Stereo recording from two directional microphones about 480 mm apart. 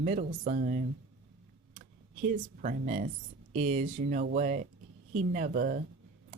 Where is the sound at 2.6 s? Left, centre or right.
Centre.